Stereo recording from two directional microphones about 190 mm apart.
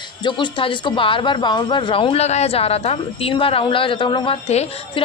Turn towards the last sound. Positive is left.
turn(degrees=30)  # may be behind; listen again after turning